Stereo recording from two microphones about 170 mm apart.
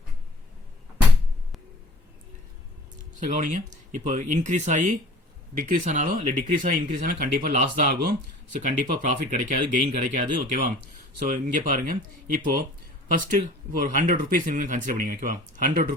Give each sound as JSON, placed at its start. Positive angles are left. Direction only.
{"t": 3.2, "sound": "speech", "side_deg": -50}
{"t": 8.6, "sound": "speech", "side_deg": -50}